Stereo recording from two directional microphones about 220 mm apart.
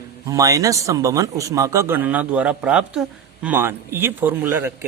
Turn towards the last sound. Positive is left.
turn(degrees=-10)  # may be behind; listen again after turning